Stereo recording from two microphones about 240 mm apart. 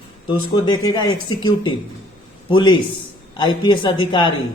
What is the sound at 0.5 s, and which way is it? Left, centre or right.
A man's voice, centre.